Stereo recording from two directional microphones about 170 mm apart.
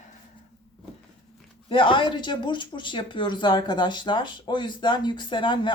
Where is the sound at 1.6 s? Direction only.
30° left (ahead or behind).